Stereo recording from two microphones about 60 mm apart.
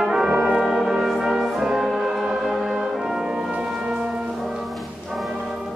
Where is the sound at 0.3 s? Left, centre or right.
Right.